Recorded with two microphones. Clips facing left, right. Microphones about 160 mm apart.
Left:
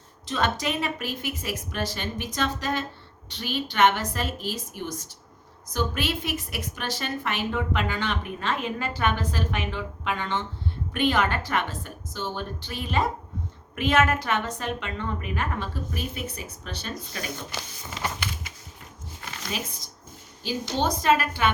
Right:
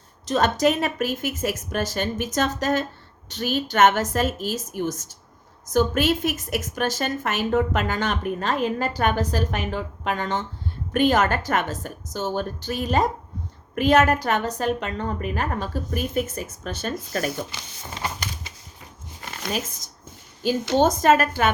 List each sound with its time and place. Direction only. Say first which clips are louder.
0.3 s a woman's voice: right 7 dB; 40° right (ahead or behind)
19.4 s a woman's voice: right 5 dB; 45° right (ahead or behind)